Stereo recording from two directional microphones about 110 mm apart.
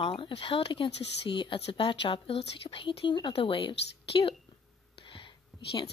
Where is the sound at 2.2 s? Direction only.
65° left (ahead or behind).